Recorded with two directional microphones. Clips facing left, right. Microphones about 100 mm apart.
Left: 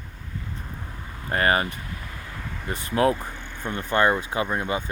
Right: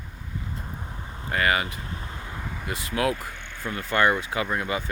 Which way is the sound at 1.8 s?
30° right (ahead or behind).